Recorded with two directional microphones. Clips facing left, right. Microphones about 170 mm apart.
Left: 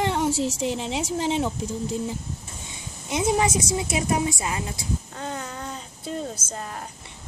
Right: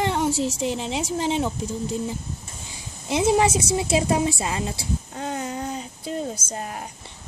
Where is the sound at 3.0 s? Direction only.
30° right (ahead or behind).